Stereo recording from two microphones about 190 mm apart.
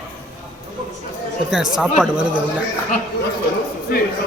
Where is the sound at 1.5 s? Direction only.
5° right (ahead or behind).